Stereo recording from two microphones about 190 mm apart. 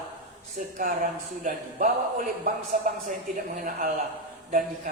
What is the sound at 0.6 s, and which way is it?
Speech, 45° right (ahead or behind).